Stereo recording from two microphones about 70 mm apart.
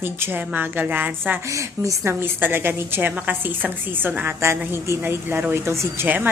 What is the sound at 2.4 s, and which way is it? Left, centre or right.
A woman's voice, right.